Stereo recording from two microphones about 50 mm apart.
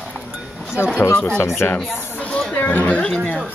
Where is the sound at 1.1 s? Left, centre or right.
Left.